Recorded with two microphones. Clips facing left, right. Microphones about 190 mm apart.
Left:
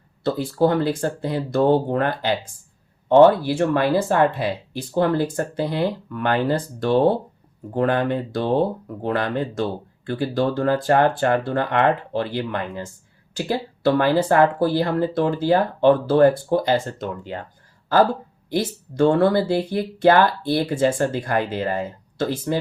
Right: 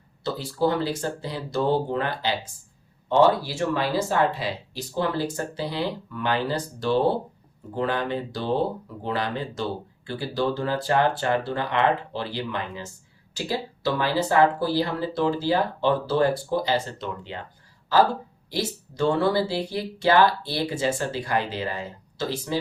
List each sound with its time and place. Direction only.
0.3 s speech: 55° left (ahead or behind)
18.5 s speech: 55° left (ahead or behind)